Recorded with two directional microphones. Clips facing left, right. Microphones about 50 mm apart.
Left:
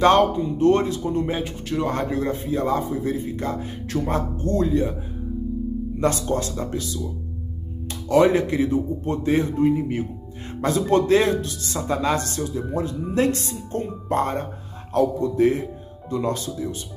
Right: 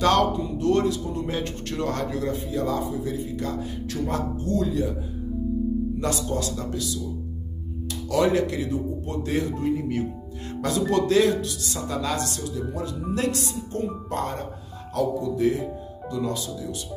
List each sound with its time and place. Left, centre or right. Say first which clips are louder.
0.0 s speech: left 4 dB; left
1.4 s speech: left 3 dB; centre
1.9 s speech: left 2 dB; left
5.9 s speech: left 4 dB; left